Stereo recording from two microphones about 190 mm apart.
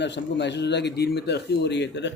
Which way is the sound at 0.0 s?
65° left (ahead or behind).